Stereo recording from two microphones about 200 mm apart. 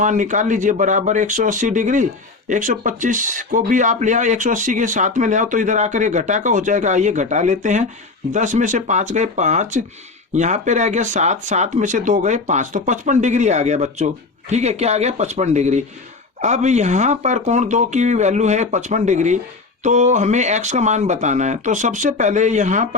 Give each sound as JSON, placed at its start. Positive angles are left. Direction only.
{"t": 0.0, "sound": "speech", "side_deg": -40}